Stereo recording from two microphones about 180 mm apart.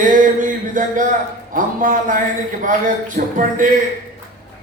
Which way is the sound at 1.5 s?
50° right (ahead or behind).